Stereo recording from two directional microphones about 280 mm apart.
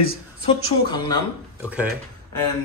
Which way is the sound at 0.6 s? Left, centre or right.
Centre.